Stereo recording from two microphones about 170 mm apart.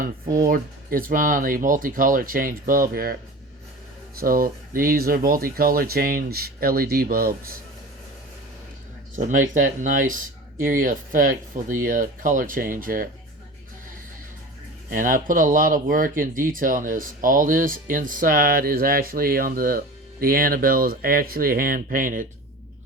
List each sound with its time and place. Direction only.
0.0 s speech: 55° right (ahead or behind)
4.2 s speech: 55° right (ahead or behind)
9.1 s speech: 50° right (ahead or behind)
14.8 s speech: 55° right (ahead or behind)